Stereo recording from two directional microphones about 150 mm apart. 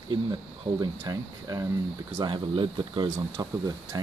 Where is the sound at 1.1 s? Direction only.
25° right (ahead or behind).